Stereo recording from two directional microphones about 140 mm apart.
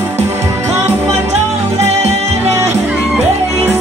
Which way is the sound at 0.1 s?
20° right (ahead or behind).